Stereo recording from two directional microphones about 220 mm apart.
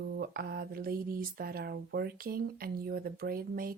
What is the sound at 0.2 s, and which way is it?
Speech, 45° right (ahead or behind).